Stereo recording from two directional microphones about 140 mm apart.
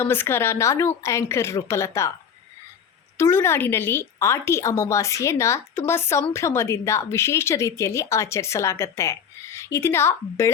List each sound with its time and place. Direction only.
0.0 s a woman's voice: 15° left (ahead or behind)
3.2 s a woman's voice: 20° left (ahead or behind)